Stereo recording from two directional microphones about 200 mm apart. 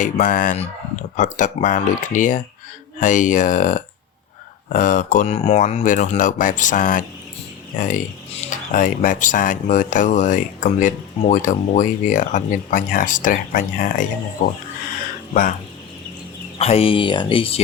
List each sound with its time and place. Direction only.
0.0 s speech: 40° left (ahead or behind)
15.3 s speech: 40° left (ahead or behind)
16.6 s speech: 30° left (ahead or behind)